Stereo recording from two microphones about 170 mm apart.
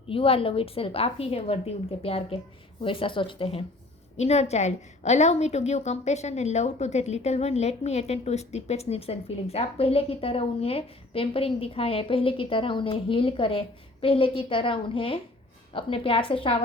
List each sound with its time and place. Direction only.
0.1 s a woman's voice: 35° left (ahead or behind)